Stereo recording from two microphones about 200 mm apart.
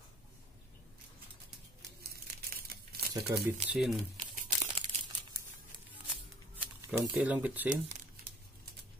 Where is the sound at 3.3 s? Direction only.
15° right (ahead or behind).